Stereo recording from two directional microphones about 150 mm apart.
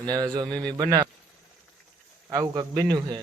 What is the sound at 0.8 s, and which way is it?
Speech, 30° right (ahead or behind).